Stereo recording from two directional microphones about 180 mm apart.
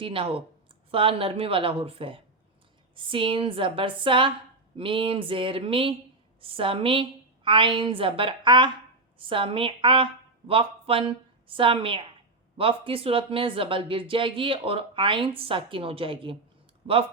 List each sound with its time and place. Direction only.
0.0 s a woman's voice: 30° right (ahead or behind)